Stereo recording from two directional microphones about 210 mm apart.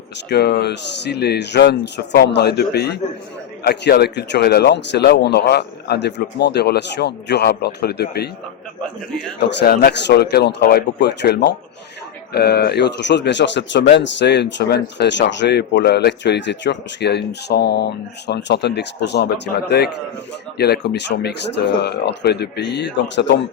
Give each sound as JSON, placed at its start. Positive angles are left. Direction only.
{"t": 0.3, "sound": "speech", "side_deg": 50}
{"t": 9.5, "sound": "speech", "side_deg": 55}